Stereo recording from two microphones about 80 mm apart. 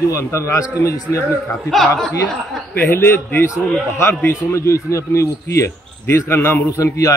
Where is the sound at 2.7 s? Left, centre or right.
Left.